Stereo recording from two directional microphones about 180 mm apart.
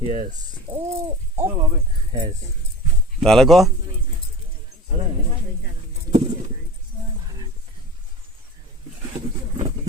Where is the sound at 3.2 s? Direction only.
Centre (ahead or behind).